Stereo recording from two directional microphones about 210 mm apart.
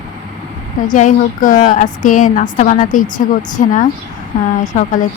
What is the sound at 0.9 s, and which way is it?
Speech, 35° left (ahead or behind).